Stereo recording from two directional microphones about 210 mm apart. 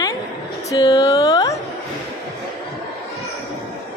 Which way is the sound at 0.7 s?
20° left (ahead or behind).